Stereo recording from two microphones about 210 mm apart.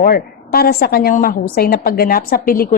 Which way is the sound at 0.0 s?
45° left (ahead or behind).